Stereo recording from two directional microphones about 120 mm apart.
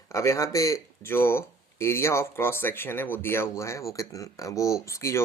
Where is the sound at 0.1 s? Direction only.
25° left (ahead or behind).